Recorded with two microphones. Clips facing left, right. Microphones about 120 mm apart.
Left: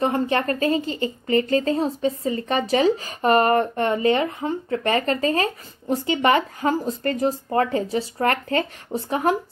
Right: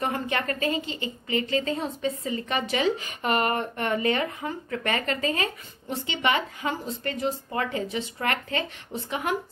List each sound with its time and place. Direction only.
0.0 s a woman's voice: 30° left (ahead or behind)